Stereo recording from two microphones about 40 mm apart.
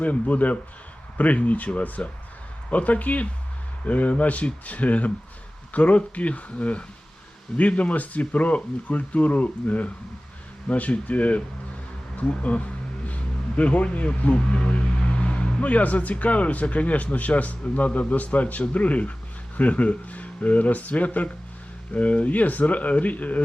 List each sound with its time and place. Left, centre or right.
0.0 s a man's voice: left
15.0 s a sound: left
15.6 s a man's voice: left